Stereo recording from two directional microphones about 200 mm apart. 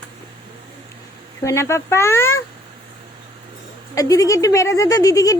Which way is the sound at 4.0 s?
15° left (ahead or behind).